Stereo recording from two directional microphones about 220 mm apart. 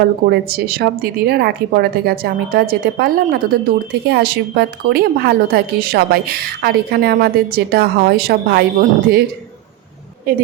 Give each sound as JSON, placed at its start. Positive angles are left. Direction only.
{"t": 0.3, "sound": "a woman's voice", "side_deg": -45}
{"t": 10.3, "sound": "a woman's voice", "side_deg": -40}